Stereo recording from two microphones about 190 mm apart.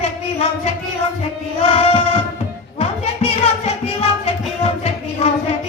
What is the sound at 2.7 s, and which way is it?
Music, 30° left (ahead or behind).